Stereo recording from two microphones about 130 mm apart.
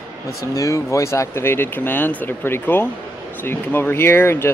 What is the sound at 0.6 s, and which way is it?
Speech, 25° left (ahead or behind).